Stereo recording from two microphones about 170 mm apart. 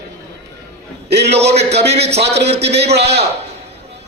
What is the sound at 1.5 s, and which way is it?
Speech, 40° right (ahead or behind).